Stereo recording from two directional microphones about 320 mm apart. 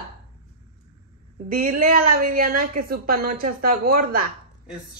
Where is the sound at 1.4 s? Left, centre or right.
Right.